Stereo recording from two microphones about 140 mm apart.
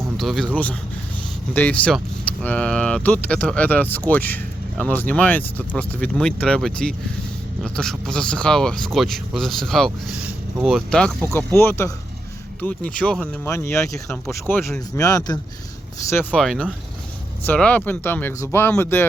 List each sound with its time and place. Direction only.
0.2 s speech: centre (ahead or behind)
11.3 s speech: 15° left (ahead or behind)
13.4 s speech: 15° left (ahead or behind)
16.4 s speech: 5° left (ahead or behind)